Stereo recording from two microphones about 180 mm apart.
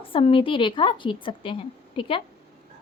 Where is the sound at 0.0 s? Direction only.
30° left (ahead or behind).